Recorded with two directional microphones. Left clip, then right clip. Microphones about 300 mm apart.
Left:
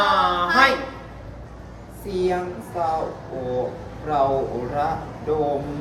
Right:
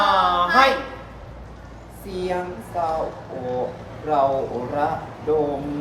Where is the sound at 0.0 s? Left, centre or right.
Centre.